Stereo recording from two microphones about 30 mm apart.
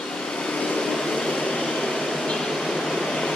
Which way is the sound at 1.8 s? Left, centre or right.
Centre.